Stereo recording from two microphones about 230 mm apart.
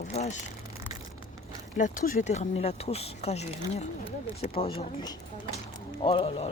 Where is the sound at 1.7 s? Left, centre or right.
Left.